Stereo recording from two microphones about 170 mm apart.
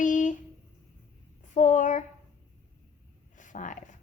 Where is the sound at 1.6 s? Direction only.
45° left (ahead or behind).